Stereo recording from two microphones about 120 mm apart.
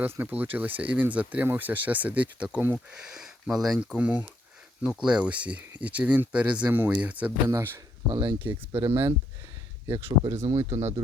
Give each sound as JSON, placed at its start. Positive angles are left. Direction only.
{"t": 0.2, "sound": "speech", "side_deg": -15}
{"t": 8.1, "sound": "speech", "side_deg": -40}
{"t": 8.9, "sound": "speech", "side_deg": -20}
{"t": 10.7, "sound": "speech", "side_deg": -70}